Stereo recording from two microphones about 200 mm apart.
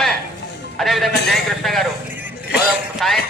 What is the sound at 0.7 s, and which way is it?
A man's voice, centre (ahead or behind).